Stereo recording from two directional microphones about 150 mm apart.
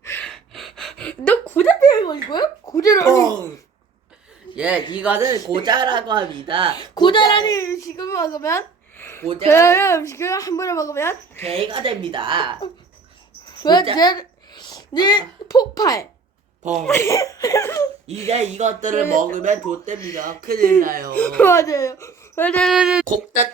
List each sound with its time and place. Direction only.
0.0 s gasp: 15° left (ahead or behind)
0.3 s a sound: 5° left (ahead or behind)
1.9 s speech: 30° left (ahead or behind)
4.5 s a man's voice: 10° right (ahead or behind)
5.5 s speech: 30° right (ahead or behind)
6.7 s a woman's voice: 30° left (ahead or behind)
11.4 s speech: 35° right (ahead or behind)
13.6 s a woman's voice: 30° left (ahead or behind)
18.3 s speech: 50° right (ahead or behind)
20.1 s speech: 75° right (ahead or behind)
21.2 s speech: 10° left (ahead or behind)
21.5 s speech: 20° left (ahead or behind)
22.4 s speech: 10° left (ahead or behind)
22.7 s a sound: 5° right (ahead or behind)